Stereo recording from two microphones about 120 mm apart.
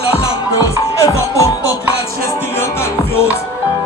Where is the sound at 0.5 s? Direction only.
25° left (ahead or behind).